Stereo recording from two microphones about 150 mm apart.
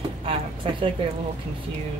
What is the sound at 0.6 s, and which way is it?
Speech, 40° right (ahead or behind).